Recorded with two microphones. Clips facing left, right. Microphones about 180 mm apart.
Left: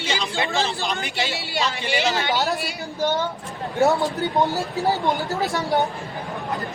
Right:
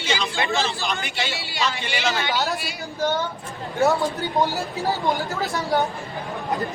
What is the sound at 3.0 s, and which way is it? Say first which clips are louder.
Speech: left 1 dB; 20° left (ahead or behind).